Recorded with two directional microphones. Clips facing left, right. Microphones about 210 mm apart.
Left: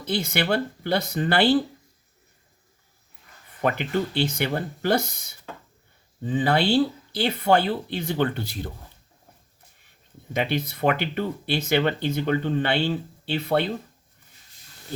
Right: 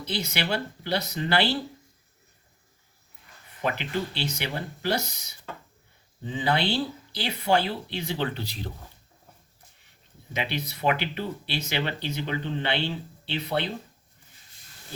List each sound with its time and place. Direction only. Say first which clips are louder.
0.1 s speech: left 5 dB; 50° left (ahead or behind)
3.6 s speech: left 5 dB; 50° left (ahead or behind)
6.3 s speech: left 5 dB; 50° left (ahead or behind)
10.3 s speech: left 6 dB; 50° left (ahead or behind)